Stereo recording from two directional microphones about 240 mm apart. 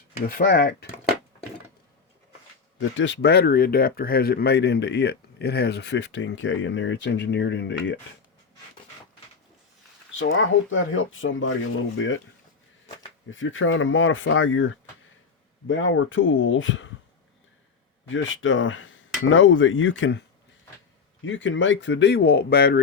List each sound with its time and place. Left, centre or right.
0.3 s speech: left
2.7 s speech: left
10.1 s speech: left
13.3 s speech: left
18.1 s speech: left
21.2 s speech: left